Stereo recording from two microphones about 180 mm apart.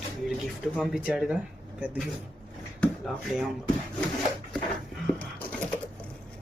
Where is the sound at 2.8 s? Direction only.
Centre (ahead or behind).